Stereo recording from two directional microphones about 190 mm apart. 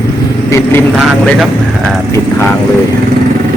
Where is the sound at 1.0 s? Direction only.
Centre (ahead or behind).